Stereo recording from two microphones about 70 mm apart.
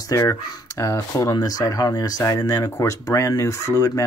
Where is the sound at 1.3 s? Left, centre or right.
Left.